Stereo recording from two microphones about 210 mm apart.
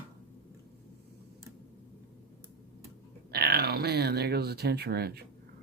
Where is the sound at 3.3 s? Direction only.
50° right (ahead or behind).